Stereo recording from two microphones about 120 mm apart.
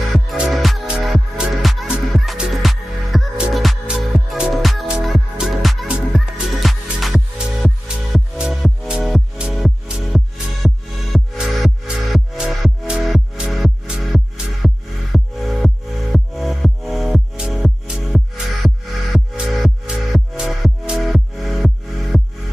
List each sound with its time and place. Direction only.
0.1 s music: centre (ahead or behind)
8.4 s music: 5° right (ahead or behind)